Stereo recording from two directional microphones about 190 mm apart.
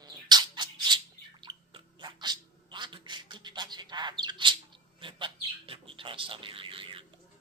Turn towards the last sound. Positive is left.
turn(degrees=-25)  # may be behind; listen again after turning